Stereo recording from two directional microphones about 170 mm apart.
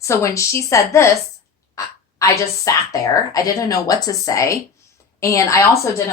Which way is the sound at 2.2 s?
20° left (ahead or behind).